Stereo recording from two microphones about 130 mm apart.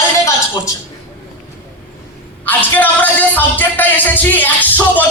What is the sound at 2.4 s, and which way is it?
A man's voice, 15° left (ahead or behind).